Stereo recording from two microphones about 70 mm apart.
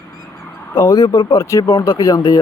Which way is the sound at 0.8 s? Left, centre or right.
Left.